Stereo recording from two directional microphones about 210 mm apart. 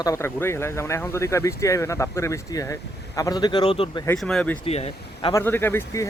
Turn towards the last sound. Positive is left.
turn(degrees=15)  # may be behind; listen again after turning